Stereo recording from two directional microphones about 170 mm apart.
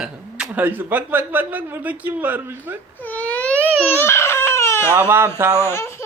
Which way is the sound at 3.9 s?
15° left (ahead or behind).